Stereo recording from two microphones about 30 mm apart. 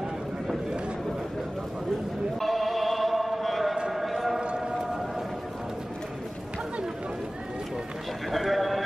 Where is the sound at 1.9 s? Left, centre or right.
Centre.